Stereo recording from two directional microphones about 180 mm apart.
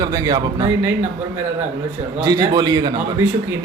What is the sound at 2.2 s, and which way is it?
Speech, 20° right (ahead or behind).